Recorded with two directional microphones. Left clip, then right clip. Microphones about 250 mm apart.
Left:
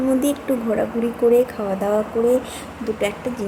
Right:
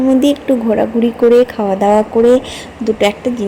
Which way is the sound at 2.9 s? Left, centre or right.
Right.